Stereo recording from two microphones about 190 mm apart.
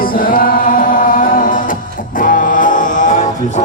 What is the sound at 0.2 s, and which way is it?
Music, 45° left (ahead or behind).